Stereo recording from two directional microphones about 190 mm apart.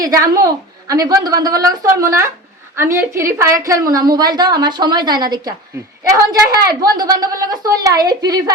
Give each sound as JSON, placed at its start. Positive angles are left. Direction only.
{"t": 0.0, "sound": "a woman's voice", "side_deg": -15}